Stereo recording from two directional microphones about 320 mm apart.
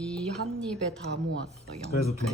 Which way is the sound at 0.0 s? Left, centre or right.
Centre.